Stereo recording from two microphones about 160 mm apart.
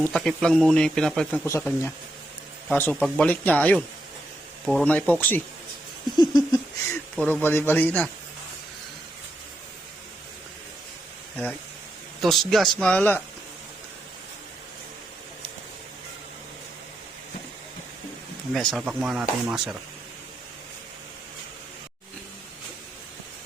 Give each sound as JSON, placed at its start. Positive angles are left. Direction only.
{"t": 0.0, "sound": "a man's voice", "side_deg": 5}
{"t": 1.5, "sound": "speech", "side_deg": 15}
{"t": 6.1, "sound": "laughter", "side_deg": 25}
{"t": 7.2, "sound": "speech", "side_deg": 10}
{"t": 12.2, "sound": "a man's voice", "side_deg": 0}
{"t": 18.5, "sound": "a man's voice", "side_deg": 0}